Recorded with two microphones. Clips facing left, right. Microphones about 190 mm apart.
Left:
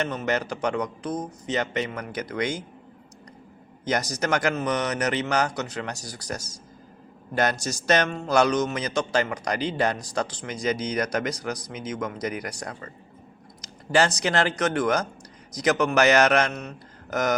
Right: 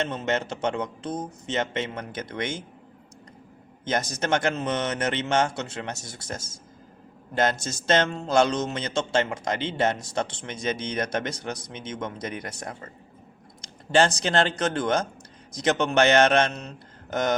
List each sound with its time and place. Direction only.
0.0 s speech: 25° right (ahead or behind)
3.8 s speech: 25° right (ahead or behind)